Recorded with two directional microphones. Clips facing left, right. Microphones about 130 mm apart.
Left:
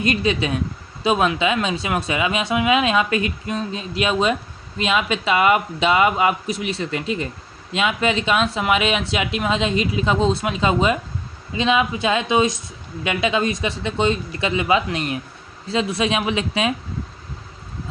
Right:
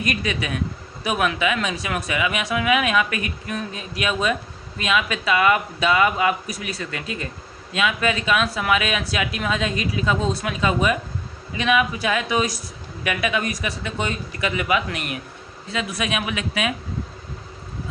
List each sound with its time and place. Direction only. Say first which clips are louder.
0.0 s speech: left 5 dB; 25° left (ahead or behind)